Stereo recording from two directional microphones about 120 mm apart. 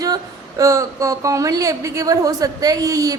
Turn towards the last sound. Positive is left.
turn(degrees=-30)  # may be behind; listen again after turning